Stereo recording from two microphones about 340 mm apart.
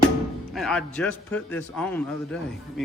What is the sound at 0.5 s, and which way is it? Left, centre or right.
Music, centre.